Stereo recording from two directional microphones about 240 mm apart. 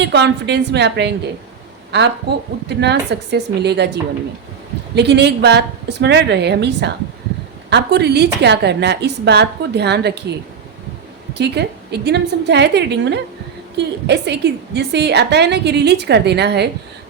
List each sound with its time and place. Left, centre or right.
0.0 s a woman's voice: right
2.6 s a woman's voice: right
4.9 s a woman's voice: right
11.3 s a woman's voice: right